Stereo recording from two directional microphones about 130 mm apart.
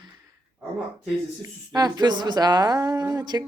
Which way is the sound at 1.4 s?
30° right (ahead or behind).